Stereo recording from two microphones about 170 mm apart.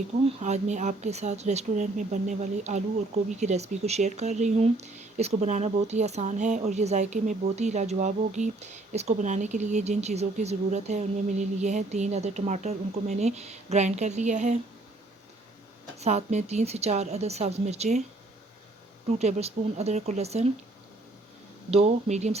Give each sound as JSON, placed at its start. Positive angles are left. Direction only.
{"t": 0.3, "sound": "speech", "side_deg": -40}
{"t": 16.0, "sound": "speech", "side_deg": -40}
{"t": 19.2, "sound": "speech", "side_deg": -40}
{"t": 21.7, "sound": "speech", "side_deg": -40}